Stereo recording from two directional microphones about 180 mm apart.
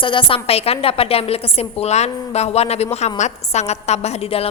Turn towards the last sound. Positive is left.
turn(degrees=35)  # may be behind; listen again after turning